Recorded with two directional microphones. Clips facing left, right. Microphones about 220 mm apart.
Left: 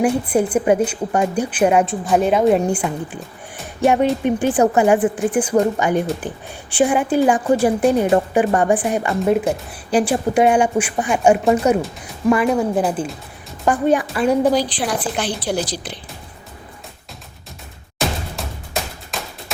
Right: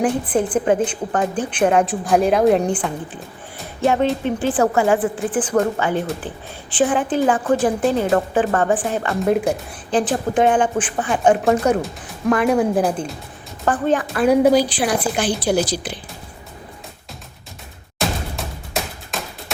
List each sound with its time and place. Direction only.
0.0 s a woman's voice: 10° left (ahead or behind)
9.2 s a woman's voice: centre (ahead or behind)
14.2 s a woman's voice: 5° right (ahead or behind)
18.3 s music: centre (ahead or behind)